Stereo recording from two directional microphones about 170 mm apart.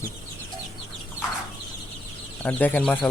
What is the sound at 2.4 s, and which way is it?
Speech, 10° left (ahead or behind).